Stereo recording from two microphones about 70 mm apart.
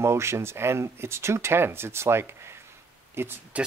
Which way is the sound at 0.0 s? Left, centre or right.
Right.